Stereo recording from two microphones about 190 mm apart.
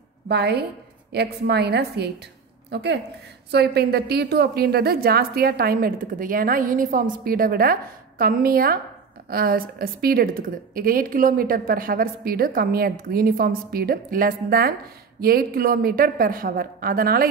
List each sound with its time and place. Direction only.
0.3 s a woman's voice: 60° right (ahead or behind)